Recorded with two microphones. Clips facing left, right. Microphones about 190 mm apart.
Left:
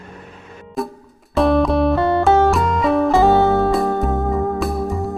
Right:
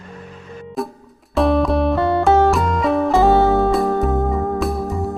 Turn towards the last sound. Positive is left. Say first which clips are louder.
# even
turn(degrees=0)  # may be behind; listen again after turning